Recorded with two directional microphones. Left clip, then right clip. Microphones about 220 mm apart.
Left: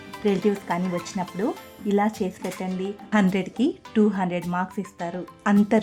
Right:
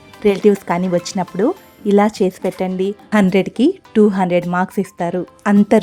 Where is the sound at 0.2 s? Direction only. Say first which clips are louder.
Right 10 dB; 20° right (ahead or behind).